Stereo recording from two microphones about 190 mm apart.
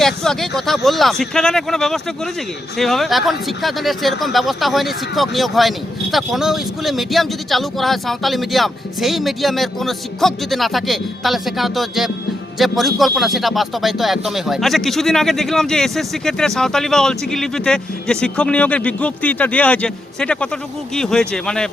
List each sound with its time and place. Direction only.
0.0 s speech: centre (ahead or behind)